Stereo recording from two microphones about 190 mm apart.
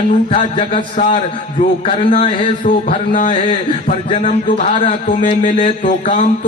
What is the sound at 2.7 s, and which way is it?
Speech, 40° left (ahead or behind).